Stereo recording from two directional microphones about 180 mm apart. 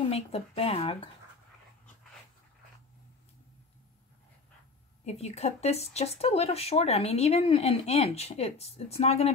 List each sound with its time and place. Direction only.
0.1 s speech: 35° left (ahead or behind)
5.0 s speech: 35° left (ahead or behind)